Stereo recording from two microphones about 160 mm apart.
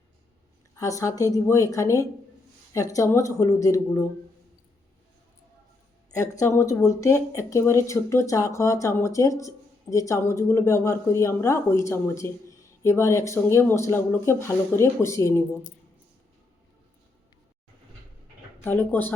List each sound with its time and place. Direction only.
0.8 s speech: 20° left (ahead or behind)
6.1 s speech: 20° left (ahead or behind)
18.6 s speech: 10° left (ahead or behind)